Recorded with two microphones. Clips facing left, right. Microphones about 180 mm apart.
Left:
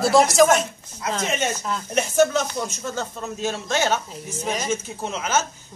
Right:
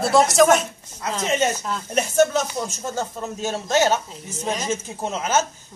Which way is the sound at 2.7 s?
45° right (ahead or behind).